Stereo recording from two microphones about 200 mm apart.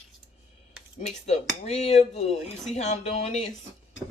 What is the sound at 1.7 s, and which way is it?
Speech, 35° left (ahead or behind).